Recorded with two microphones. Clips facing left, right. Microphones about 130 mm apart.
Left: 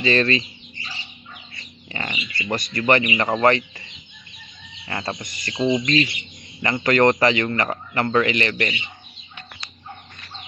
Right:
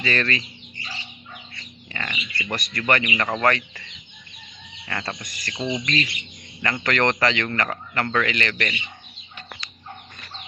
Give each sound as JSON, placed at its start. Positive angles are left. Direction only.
{"t": 0.0, "sound": "speech", "side_deg": 25}
{"t": 0.7, "sound": "bird", "side_deg": 0}
{"t": 1.6, "sound": "bird", "side_deg": 25}
{"t": 2.3, "sound": "speech", "side_deg": 25}